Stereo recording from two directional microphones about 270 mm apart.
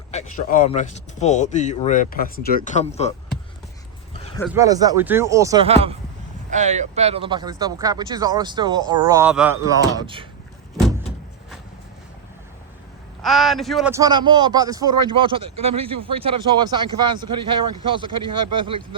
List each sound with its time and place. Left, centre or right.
0.1 s speech: left
4.5 s a man's voice: centre
13.2 s a man's voice: centre